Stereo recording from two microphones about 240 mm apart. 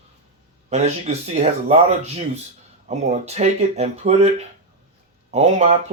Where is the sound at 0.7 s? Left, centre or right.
Right.